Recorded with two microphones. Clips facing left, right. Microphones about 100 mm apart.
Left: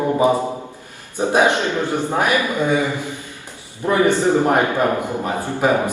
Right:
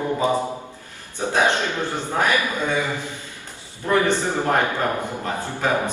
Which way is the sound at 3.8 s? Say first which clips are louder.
Left 4 dB; 20° left (ahead or behind).